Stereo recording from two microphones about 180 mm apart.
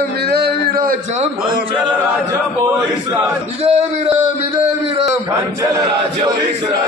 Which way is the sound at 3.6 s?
35° right (ahead or behind).